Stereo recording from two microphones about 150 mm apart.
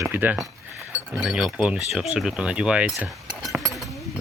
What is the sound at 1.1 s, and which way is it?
Speech, 5° right (ahead or behind).